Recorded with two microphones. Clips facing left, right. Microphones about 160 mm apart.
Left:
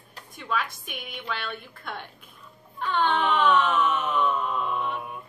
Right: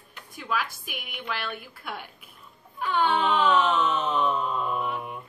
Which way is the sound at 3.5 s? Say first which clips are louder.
Even; 25° right (ahead or behind).